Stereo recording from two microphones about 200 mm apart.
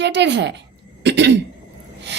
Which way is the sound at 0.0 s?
60° right (ahead or behind).